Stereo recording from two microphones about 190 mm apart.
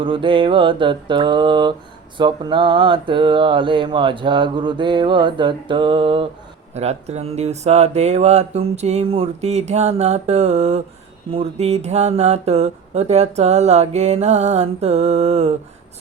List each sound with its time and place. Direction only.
0.0 s speech: 25° right (ahead or behind)